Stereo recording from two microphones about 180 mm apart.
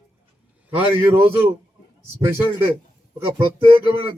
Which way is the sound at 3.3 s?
30° right (ahead or behind).